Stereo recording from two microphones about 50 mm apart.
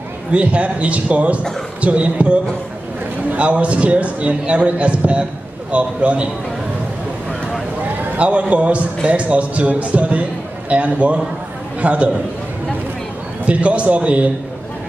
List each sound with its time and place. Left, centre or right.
0.3 s a man's voice: right
8.2 s a man's voice: right
13.5 s a man's voice: right